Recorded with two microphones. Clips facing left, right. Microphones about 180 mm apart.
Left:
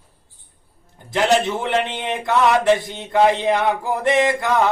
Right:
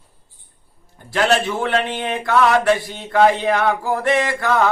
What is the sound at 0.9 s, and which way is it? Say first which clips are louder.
A man's voice: even; 20° left (ahead or behind).